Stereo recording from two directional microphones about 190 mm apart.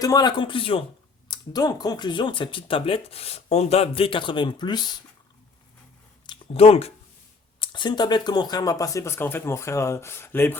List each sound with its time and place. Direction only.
0.0 s speech: 20° left (ahead or behind)
6.2 s speech: 30° left (ahead or behind); by 10.6 s 10° left (ahead or behind)